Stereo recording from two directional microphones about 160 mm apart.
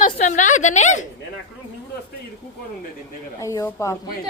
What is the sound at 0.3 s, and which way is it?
Speech, 50° left (ahead or behind).